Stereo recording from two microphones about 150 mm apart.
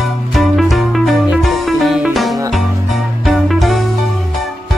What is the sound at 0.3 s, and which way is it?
Music, centre (ahead or behind).